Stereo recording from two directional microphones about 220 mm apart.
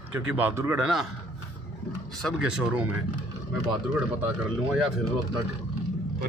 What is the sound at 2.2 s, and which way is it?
Speech, centre (ahead or behind).